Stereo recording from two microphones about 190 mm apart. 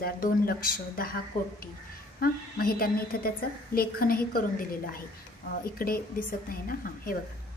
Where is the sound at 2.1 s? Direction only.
50° left (ahead or behind).